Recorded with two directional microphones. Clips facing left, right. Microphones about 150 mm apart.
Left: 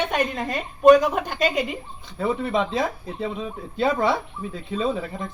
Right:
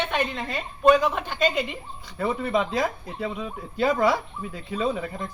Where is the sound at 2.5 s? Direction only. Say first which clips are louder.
Left 1 dB; 25° left (ahead or behind).